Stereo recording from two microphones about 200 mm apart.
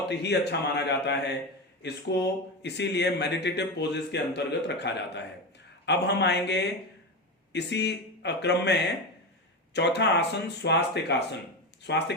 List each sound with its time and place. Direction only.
0.0 s a man's voice: 60° left (ahead or behind)